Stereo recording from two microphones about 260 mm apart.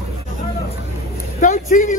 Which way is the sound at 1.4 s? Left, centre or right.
Left.